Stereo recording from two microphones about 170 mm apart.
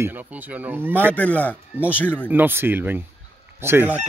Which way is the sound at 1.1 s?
10° left (ahead or behind).